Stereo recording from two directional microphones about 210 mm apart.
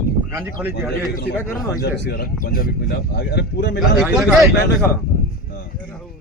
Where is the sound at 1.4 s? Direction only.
10° left (ahead or behind).